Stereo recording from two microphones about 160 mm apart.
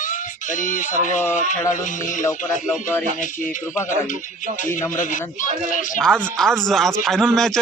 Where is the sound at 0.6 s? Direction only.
55° left (ahead or behind).